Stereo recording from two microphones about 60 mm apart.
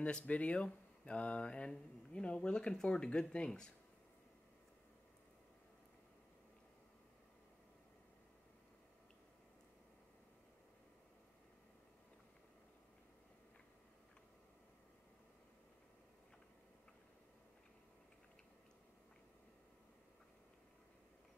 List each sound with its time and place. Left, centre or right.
0.0 s speech: left